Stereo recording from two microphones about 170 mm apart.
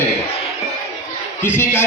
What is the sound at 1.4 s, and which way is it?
Speech, 15° left (ahead or behind).